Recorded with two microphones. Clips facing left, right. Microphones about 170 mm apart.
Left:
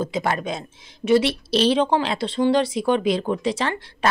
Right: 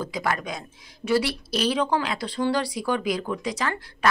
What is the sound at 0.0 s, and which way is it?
Speech, 25° left (ahead or behind).